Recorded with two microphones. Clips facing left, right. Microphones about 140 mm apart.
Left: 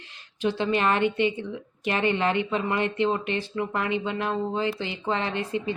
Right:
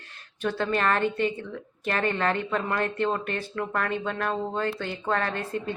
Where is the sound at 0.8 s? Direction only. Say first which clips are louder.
Left 1 dB; 15° left (ahead or behind).